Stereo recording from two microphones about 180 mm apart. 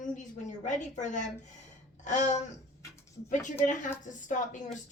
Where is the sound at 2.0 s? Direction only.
40° left (ahead or behind).